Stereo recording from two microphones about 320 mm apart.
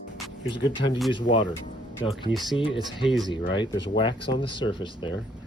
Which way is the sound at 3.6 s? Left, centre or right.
Centre.